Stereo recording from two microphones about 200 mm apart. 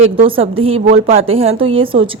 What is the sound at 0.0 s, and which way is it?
A woman's voice, 25° right (ahead or behind).